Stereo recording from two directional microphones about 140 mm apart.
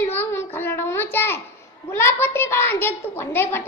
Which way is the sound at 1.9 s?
20° left (ahead or behind).